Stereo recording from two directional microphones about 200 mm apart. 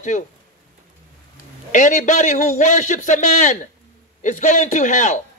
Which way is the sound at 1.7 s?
40° left (ahead or behind).